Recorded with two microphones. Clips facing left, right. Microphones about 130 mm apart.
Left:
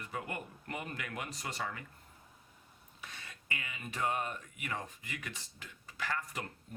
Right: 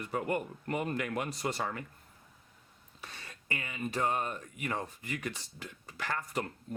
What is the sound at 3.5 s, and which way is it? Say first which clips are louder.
Speech: right 7 dB; 35° right (ahead or behind).